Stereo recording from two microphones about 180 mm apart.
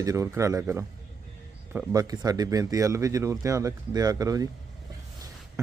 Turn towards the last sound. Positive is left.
turn(degrees=-20)  # may be behind; listen again after turning